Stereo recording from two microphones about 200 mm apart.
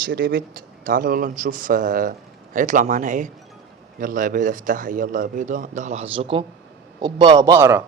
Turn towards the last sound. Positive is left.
turn(degrees=-15)  # may be behind; listen again after turning